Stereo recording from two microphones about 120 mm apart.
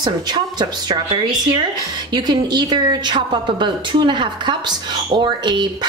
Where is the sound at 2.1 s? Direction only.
35° right (ahead or behind).